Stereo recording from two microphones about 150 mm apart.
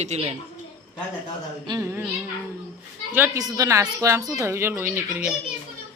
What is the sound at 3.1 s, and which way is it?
A woman's voice, 15° right (ahead or behind).